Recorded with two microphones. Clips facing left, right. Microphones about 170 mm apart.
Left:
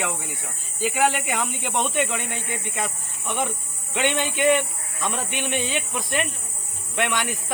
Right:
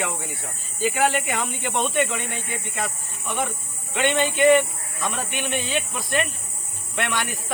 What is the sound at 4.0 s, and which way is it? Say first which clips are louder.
Speech: right 3 dB; 15° left (ahead or behind).